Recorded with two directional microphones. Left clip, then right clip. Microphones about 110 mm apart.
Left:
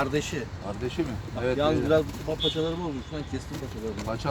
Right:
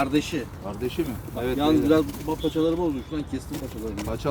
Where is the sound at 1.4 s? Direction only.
20° left (ahead or behind).